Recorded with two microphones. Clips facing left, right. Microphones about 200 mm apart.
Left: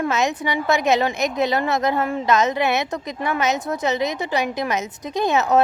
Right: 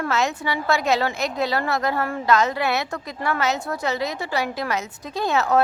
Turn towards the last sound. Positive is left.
turn(degrees=20)  # may be behind; listen again after turning